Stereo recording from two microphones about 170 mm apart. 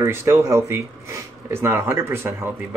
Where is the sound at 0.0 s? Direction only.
15° right (ahead or behind).